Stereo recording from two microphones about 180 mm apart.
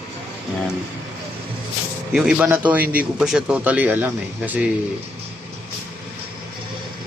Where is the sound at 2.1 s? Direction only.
5° right (ahead or behind).